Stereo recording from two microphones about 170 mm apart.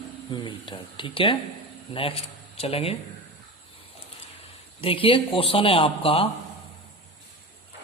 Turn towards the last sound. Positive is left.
turn(degrees=35)  # may be behind; listen again after turning